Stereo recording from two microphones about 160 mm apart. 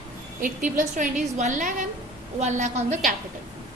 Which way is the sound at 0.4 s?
55° right (ahead or behind).